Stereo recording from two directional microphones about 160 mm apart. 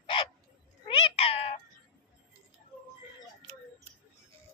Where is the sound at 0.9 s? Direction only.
35° left (ahead or behind).